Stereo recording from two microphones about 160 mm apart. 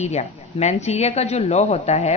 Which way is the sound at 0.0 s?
45° left (ahead or behind).